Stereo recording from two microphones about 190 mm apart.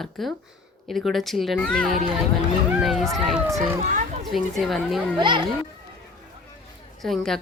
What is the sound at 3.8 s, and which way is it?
Children playing, 40° right (ahead or behind).